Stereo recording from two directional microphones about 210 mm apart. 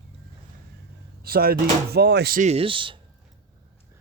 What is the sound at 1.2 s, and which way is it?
Speech, 45° right (ahead or behind).